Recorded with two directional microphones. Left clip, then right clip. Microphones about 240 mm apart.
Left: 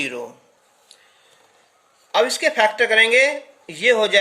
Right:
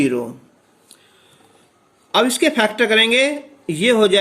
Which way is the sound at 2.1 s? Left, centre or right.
Centre.